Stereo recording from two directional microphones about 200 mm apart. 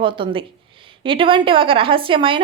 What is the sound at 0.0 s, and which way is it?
A woman's voice, 25° right (ahead or behind).